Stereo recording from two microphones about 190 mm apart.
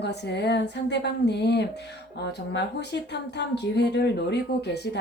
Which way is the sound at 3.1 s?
65° left (ahead or behind).